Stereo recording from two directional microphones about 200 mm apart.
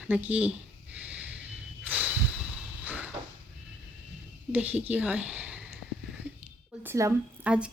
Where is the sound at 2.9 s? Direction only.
5° right (ahead or behind).